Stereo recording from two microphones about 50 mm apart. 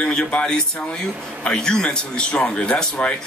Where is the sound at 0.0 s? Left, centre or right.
Centre.